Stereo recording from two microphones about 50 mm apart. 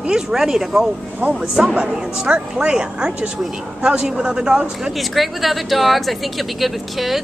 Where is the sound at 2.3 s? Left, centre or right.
Right.